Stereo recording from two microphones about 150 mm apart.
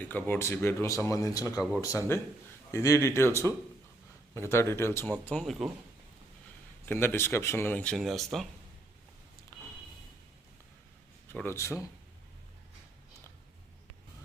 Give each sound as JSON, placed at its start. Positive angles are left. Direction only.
{"t": 0.0, "sound": "speech", "side_deg": 15}
{"t": 6.8, "sound": "speech", "side_deg": 15}
{"t": 11.3, "sound": "speech", "side_deg": 15}